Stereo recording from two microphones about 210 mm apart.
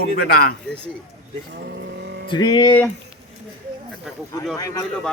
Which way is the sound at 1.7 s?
55° right (ahead or behind).